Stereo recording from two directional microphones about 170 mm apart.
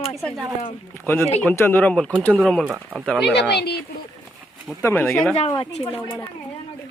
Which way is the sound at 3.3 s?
80° left.